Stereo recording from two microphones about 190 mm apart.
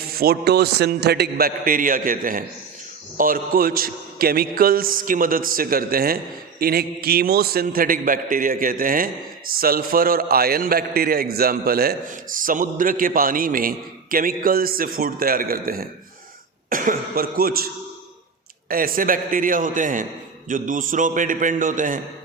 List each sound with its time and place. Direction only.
0.1 s a man's voice: 55° right (ahead or behind)
18.7 s a man's voice: 50° right (ahead or behind)